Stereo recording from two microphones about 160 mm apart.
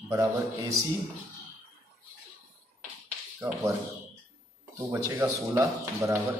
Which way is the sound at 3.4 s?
20° right (ahead or behind).